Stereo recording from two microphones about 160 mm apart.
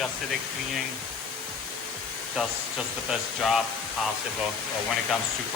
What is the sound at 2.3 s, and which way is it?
Speech, centre (ahead or behind).